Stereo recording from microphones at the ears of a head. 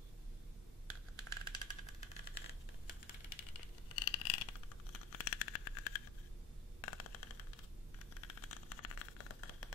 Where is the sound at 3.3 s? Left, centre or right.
Left.